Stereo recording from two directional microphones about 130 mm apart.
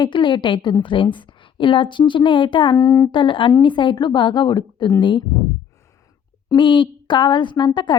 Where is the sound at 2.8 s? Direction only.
25° left (ahead or behind).